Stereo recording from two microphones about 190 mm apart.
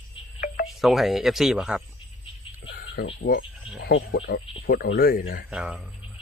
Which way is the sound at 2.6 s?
55° left (ahead or behind).